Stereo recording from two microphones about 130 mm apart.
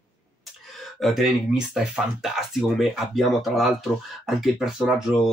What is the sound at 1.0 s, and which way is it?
Speech, centre (ahead or behind).